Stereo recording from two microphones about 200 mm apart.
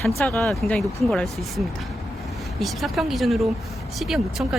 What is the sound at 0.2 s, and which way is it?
Speech, 5° left (ahead or behind).